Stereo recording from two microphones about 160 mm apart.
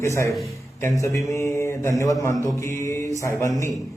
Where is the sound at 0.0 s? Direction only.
20° left (ahead or behind).